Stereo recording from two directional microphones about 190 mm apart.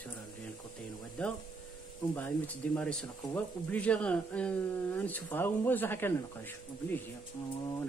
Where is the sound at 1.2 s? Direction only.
5° left (ahead or behind).